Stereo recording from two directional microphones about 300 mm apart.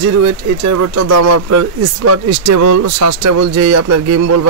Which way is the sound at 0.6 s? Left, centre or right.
Right.